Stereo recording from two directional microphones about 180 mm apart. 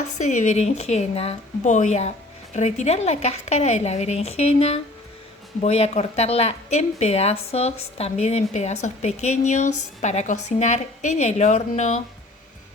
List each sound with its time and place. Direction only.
0.2 s a woman's voice: 40° left (ahead or behind)